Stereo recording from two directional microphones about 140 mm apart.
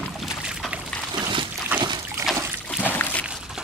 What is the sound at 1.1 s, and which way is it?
Dog, 35° right (ahead or behind).